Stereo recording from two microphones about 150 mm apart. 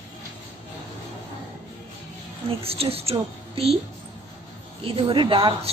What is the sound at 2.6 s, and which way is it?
Speech, 40° right (ahead or behind).